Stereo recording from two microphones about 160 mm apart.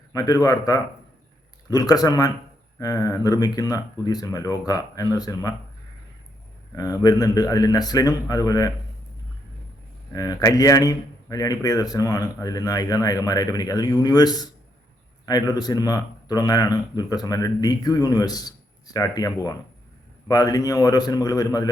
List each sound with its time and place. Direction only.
0.1 s a man's voice: 20° left (ahead or behind)
6.7 s a man's voice: 20° left (ahead or behind)
10.1 s a man's voice: 20° left (ahead or behind)